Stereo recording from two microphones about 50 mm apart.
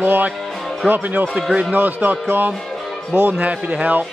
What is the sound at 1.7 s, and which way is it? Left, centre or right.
Speech, right.